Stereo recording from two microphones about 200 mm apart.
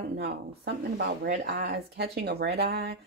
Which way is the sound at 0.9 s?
50° right (ahead or behind).